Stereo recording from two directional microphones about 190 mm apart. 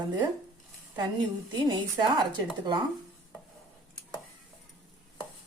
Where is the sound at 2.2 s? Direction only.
25° right (ahead or behind).